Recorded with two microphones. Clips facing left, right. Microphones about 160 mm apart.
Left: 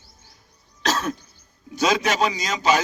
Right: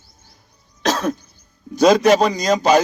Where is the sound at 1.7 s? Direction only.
40° right (ahead or behind).